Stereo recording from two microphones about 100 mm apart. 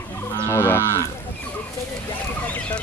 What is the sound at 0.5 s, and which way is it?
Livestock, 25° left (ahead or behind).